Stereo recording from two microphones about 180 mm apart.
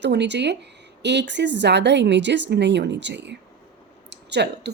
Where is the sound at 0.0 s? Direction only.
75° right (ahead or behind).